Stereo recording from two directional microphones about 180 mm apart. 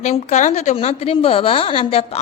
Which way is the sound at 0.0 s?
40° left (ahead or behind).